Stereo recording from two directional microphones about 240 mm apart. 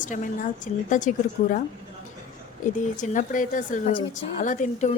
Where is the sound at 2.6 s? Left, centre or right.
Left.